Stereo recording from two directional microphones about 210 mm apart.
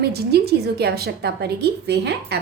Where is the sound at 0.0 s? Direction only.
50° right (ahead or behind).